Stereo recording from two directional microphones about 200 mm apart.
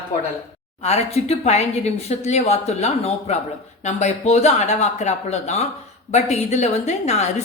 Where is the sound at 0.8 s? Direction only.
35° left (ahead or behind).